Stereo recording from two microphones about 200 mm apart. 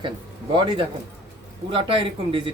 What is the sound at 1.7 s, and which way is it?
Speech, 25° right (ahead or behind).